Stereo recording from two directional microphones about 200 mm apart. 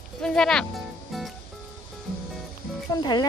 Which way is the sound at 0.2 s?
5° left (ahead or behind).